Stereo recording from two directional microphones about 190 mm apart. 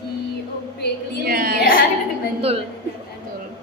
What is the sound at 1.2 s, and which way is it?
Speech, 50° right (ahead or behind).